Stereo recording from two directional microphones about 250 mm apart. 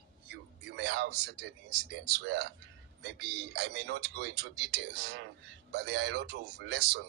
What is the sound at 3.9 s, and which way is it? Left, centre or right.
A man's voice, right.